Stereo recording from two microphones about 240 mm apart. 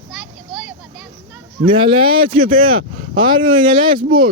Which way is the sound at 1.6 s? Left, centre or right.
Right.